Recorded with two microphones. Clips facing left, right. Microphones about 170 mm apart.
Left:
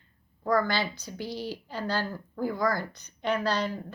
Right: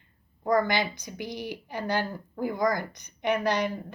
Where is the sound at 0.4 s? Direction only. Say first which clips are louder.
Right 2 dB; 15° right (ahead or behind).